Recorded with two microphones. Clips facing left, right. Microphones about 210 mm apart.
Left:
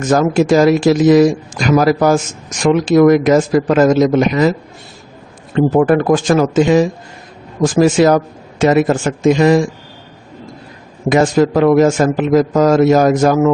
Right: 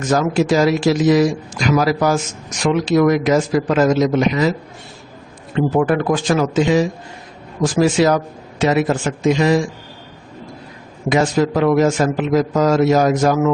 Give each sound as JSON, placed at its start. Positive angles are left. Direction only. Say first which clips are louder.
{"t": 0.0, "sound": "a man's voice", "louder": "left 4 dB", "side_deg": 50}
{"t": 5.5, "sound": "a man's voice", "louder": "left 5 dB", "side_deg": 45}
{"t": 11.1, "sound": "a man's voice", "louder": "left 4 dB", "side_deg": 50}